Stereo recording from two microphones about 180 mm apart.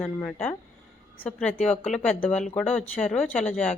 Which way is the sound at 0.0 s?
10° left (ahead or behind).